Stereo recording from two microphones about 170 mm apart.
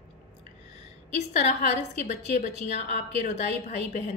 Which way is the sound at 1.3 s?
40° left (ahead or behind).